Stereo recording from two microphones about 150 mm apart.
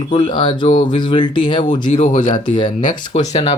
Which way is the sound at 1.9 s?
55° left (ahead or behind).